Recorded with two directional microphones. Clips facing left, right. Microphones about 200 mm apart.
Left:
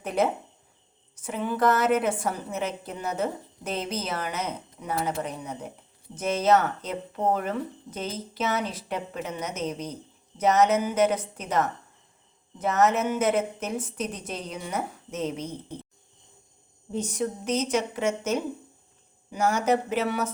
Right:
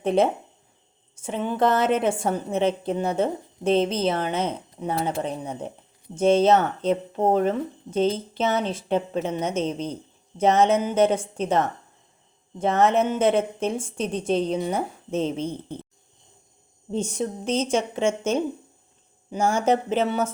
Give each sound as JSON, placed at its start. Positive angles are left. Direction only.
{"t": 0.0, "sound": "speech", "side_deg": -25}
{"t": 16.9, "sound": "speech", "side_deg": -25}